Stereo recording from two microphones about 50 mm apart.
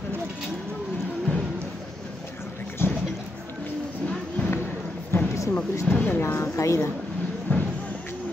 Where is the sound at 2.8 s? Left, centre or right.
Left.